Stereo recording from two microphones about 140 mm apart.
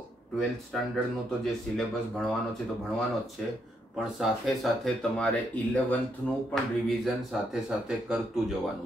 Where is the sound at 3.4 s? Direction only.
Centre (ahead or behind).